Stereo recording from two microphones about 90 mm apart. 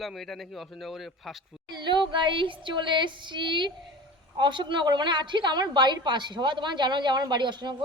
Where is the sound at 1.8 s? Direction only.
60° right (ahead or behind).